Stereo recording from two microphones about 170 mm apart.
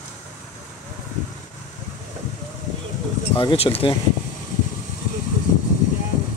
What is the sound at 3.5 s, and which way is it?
Speech, 35° left (ahead or behind).